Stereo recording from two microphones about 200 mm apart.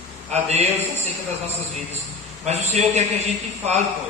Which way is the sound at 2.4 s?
35° right (ahead or behind).